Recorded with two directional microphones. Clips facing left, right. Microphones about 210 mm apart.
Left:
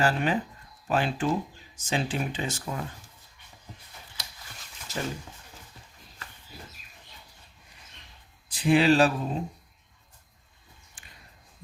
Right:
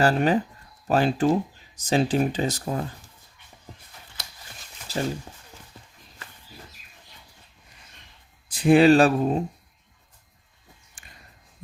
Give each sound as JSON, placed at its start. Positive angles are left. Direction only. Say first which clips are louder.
{"t": 0.0, "sound": "speech", "louder": "right 5 dB", "side_deg": -40}
{"t": 4.9, "sound": "speech", "louder": "right 6 dB", "side_deg": -35}
{"t": 8.4, "sound": "speech", "louder": "right 6 dB", "side_deg": -50}